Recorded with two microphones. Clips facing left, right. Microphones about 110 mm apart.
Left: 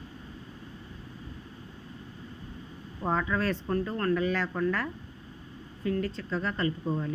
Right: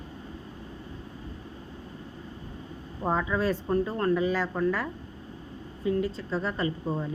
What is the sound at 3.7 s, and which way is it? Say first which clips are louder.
Speech: right 3 dB; 20° right (ahead or behind).